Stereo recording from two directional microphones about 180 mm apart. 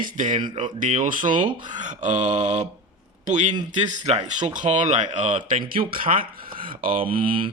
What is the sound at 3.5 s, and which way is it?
Speech, 25° right (ahead or behind).